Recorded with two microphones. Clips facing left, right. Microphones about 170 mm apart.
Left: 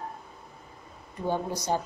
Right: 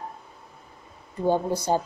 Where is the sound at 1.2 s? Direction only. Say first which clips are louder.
Right 6 dB; 30° right (ahead or behind).